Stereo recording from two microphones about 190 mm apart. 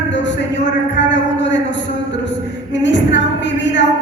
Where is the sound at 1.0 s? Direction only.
70° left (ahead or behind).